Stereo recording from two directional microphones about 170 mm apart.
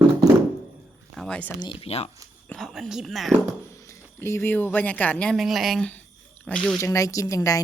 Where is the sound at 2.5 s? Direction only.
Centre (ahead or behind).